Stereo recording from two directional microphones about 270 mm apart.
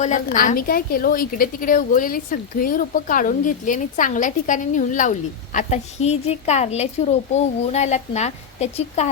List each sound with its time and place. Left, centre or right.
0.0 s a woman's voice: left